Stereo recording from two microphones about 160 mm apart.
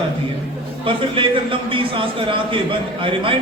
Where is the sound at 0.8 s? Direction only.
35° right (ahead or behind).